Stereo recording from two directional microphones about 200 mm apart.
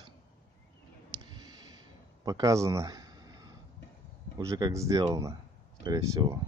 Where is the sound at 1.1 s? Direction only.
20° right (ahead or behind).